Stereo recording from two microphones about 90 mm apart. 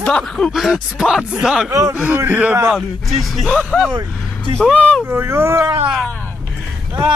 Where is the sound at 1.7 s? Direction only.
35° right (ahead or behind).